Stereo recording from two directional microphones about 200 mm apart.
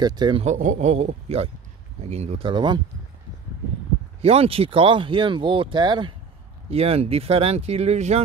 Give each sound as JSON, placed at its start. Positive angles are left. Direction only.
{"t": 0.0, "sound": "speech", "side_deg": -20}
{"t": 0.5, "sound": "speech", "side_deg": -35}
{"t": 4.2, "sound": "speech", "side_deg": -30}